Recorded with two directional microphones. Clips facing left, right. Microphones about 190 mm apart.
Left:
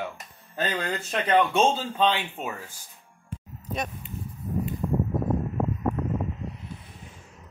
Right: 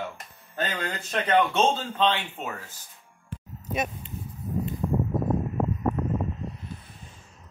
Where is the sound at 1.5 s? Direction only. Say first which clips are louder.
Left 1 dB; 10° left (ahead or behind).